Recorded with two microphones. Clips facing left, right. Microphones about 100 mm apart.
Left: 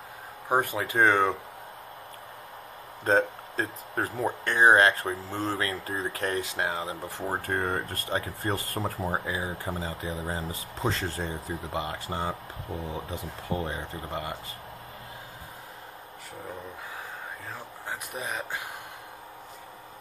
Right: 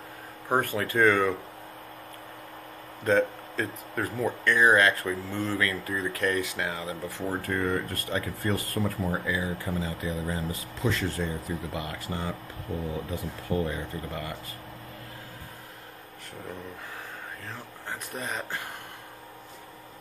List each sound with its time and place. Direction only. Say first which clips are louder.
0.5 s speech: even; 15° left (ahead or behind)
3.0 s speech: even; 30° left (ahead or behind)
18.1 s speech: right 1 dB; 5° left (ahead or behind)